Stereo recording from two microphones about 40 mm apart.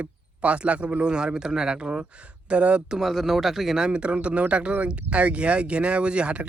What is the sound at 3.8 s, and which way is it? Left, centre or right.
A man's voice, right.